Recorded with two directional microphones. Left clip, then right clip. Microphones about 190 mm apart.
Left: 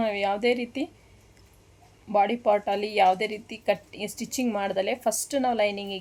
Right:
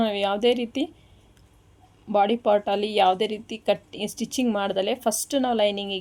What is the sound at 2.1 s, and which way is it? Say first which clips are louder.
Speech: right 2 dB; 30° right (ahead or behind).